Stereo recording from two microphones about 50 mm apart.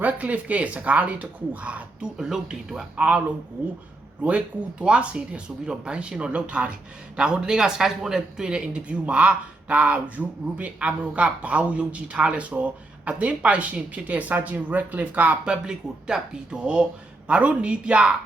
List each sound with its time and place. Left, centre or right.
0.0 s speech: right
2.1 s speech: centre
2.9 s speech: right
4.2 s speech: right
15.4 s speech: centre